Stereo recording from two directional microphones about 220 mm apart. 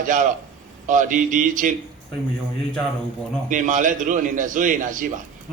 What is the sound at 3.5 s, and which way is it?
A man's voice, 35° right (ahead or behind).